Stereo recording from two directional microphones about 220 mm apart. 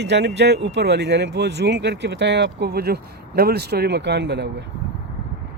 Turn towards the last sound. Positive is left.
turn(degrees=-50)  # may be behind; listen again after turning